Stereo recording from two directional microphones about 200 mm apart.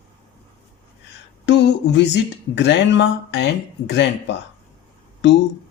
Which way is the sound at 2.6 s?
60° left (ahead or behind).